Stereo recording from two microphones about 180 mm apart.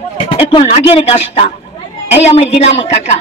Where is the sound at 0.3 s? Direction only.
30° left (ahead or behind).